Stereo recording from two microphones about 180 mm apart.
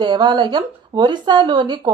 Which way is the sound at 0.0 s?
25° right (ahead or behind).